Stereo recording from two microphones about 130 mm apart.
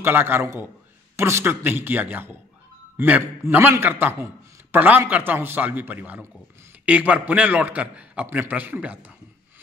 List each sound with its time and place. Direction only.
0.0 s a man's voice: 15° right (ahead or behind)